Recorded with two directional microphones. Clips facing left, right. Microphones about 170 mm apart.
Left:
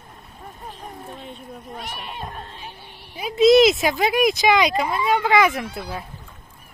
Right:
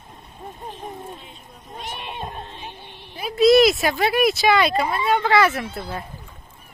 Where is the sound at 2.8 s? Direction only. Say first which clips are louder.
Left 1 dB; 10° left (ahead or behind).